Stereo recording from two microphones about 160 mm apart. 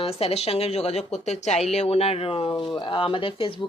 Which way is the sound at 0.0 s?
40° left (ahead or behind).